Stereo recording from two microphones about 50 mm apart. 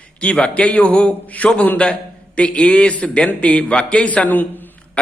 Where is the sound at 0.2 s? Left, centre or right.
Left.